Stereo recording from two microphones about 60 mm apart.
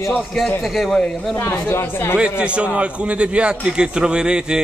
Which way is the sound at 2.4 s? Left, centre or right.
Centre.